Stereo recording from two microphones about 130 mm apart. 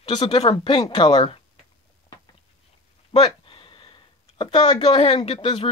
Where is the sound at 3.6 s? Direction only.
40° left (ahead or behind).